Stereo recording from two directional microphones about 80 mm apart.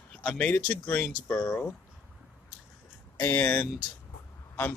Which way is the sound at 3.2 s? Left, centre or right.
Left.